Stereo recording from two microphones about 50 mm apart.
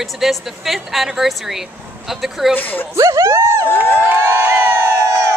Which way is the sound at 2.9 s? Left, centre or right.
Right.